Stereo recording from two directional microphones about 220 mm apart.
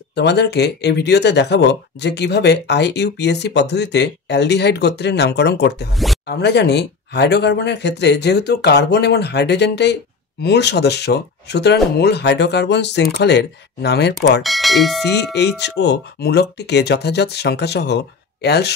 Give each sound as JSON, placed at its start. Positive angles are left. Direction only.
{"t": 0.1, "sound": "speech", "side_deg": 50}
{"t": 14.4, "sound": "speech", "side_deg": 0}
{"t": 15.3, "sound": "speech", "side_deg": 50}